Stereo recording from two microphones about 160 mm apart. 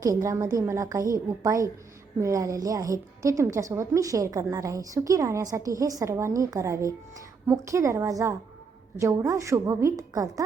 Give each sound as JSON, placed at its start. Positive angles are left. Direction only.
{"t": 0.0, "sound": "a woman's voice", "side_deg": -20}